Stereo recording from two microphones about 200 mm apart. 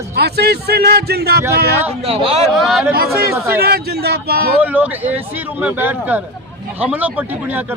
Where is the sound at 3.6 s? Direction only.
50° right (ahead or behind).